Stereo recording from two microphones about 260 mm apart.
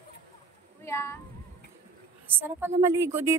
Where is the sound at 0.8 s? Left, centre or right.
Centre.